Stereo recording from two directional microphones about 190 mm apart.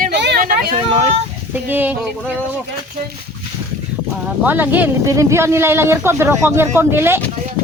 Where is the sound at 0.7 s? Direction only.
30° right (ahead or behind).